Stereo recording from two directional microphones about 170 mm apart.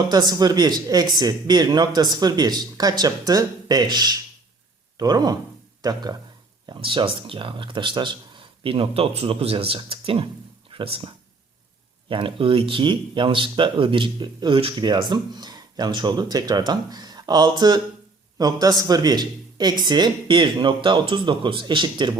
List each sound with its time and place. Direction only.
0.1 s speech: 25° right (ahead or behind)